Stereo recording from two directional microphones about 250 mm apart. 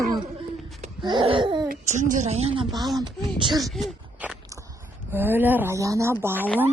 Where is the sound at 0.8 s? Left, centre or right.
Right.